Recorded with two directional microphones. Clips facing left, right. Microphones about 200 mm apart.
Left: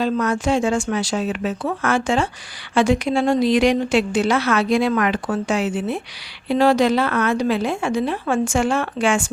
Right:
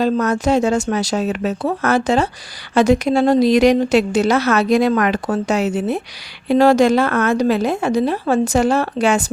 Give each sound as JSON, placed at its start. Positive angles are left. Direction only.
{"t": 0.0, "sound": "a woman's voice", "side_deg": -40}